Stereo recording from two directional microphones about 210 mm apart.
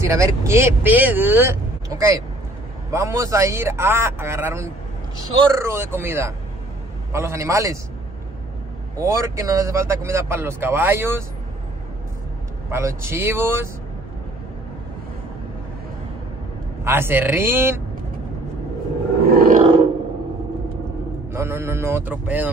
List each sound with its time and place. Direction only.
0.0 s speech: 15° right (ahead or behind)
9.0 s speech: 15° right (ahead or behind)
12.7 s speech: 10° right (ahead or behind)
16.8 s speech: 10° right (ahead or behind)
19.2 s roar: 45° right (ahead or behind)
21.3 s a man's voice: 10° right (ahead or behind)